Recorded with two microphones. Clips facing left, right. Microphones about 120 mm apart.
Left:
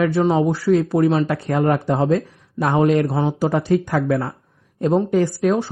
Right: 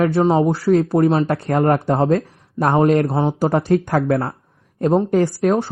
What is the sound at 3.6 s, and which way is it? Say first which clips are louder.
Speech: right 1 dB; 50° right (ahead or behind).